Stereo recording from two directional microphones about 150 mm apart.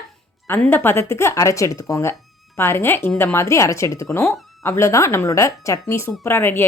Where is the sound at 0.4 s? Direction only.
15° left (ahead or behind).